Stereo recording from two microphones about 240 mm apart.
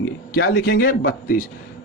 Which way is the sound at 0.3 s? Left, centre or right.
Left.